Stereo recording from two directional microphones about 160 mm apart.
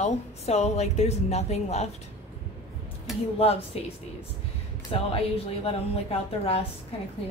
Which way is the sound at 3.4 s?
40° left (ahead or behind).